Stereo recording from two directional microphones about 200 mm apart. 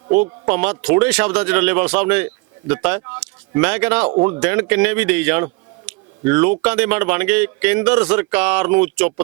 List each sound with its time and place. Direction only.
0.1 s speech: 10° right (ahead or behind)
5.9 s a sound: 5° right (ahead or behind)
6.2 s speech: 10° right (ahead or behind)